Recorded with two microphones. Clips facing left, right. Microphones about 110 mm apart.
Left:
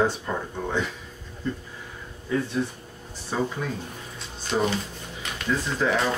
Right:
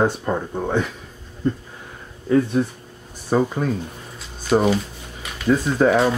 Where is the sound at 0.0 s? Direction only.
50° right (ahead or behind).